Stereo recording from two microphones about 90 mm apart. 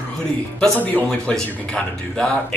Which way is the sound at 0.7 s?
15° left (ahead or behind).